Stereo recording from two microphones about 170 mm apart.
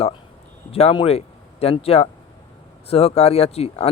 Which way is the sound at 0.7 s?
35° left (ahead or behind).